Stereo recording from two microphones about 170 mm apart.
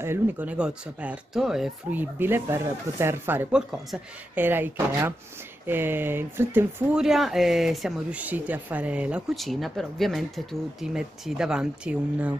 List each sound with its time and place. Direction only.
0.0 s speech: 10° right (ahead or behind)
3.7 s speech: centre (ahead or behind)
4.5 s speech: 10° right (ahead or behind)